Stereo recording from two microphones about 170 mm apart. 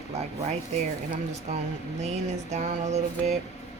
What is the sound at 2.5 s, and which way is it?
Speech, 40° right (ahead or behind).